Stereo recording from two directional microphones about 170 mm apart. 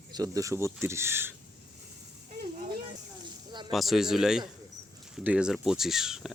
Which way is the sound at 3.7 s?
Centre (ahead or behind).